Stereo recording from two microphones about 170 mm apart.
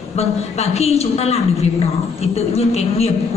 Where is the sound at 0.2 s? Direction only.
40° left (ahead or behind).